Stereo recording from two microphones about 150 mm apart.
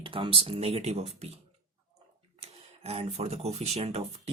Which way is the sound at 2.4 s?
40° right (ahead or behind).